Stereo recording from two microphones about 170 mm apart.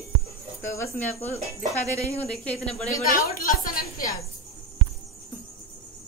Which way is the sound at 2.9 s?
50° left (ahead or behind).